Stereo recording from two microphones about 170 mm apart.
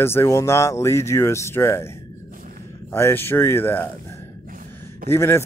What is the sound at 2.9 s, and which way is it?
Speech, 15° left (ahead or behind).